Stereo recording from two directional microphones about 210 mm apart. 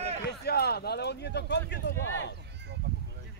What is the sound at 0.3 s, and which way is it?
Speech, 50° left (ahead or behind).